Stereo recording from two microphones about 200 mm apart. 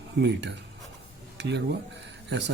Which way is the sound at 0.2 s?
60° right (ahead or behind).